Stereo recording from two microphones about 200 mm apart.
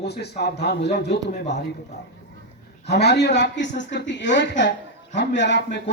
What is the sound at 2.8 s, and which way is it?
Speech, 55° left (ahead or behind).